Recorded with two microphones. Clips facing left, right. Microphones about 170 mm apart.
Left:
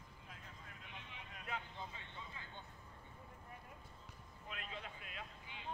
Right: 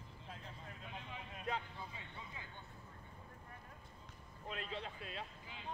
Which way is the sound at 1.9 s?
15° right (ahead or behind).